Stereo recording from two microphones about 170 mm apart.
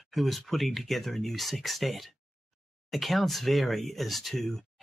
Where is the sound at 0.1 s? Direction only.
Centre (ahead or behind).